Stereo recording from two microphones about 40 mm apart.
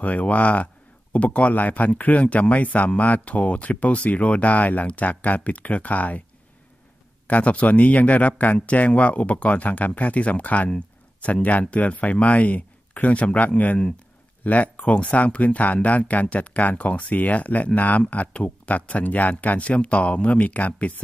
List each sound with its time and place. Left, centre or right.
0.0 s speech: left
7.2 s speech: left
11.7 s speech: left